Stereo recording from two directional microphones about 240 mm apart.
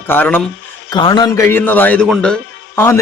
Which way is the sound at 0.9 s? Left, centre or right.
Centre.